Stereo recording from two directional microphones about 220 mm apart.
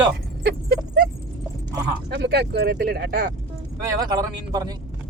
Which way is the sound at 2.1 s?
50° right (ahead or behind).